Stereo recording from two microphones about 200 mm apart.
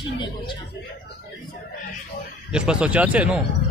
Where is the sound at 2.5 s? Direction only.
5° right (ahead or behind).